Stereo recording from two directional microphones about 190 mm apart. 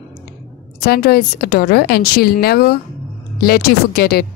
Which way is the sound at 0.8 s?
55° left (ahead or behind).